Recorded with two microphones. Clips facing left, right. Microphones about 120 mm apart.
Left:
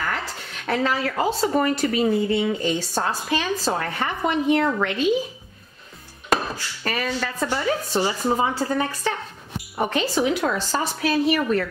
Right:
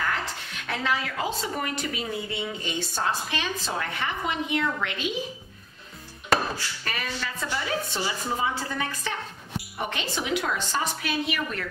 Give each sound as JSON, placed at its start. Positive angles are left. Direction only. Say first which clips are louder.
{"t": 0.7, "sound": "speech", "louder": "left 6 dB", "side_deg": 40}
{"t": 6.8, "sound": "speech", "louder": "left 7 dB", "side_deg": 40}